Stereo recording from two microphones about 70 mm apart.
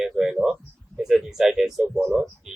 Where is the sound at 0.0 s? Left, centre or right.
Centre.